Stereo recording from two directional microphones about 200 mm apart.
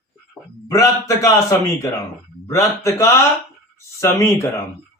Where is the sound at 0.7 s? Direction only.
15° left (ahead or behind).